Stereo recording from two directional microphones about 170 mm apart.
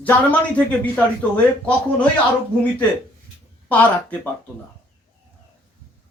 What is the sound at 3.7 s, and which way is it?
Speech, 10° left (ahead or behind).